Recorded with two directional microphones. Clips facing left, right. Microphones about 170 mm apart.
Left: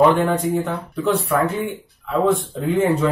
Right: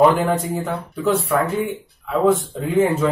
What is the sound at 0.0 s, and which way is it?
Speech, centre (ahead or behind).